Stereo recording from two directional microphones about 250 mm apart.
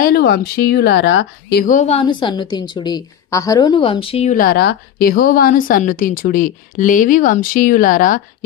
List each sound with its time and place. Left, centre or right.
0.0 s speech: left